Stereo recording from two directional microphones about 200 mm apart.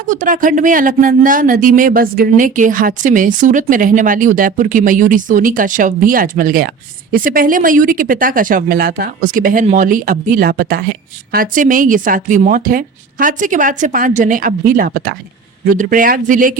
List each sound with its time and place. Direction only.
0.0 s speech: 40° right (ahead or behind)